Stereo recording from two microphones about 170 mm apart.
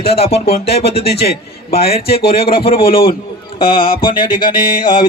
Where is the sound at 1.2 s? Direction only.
65° left (ahead or behind).